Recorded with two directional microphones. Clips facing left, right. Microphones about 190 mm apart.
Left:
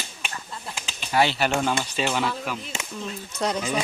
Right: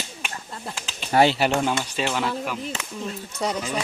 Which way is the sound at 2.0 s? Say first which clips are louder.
Even; centre (ahead or behind).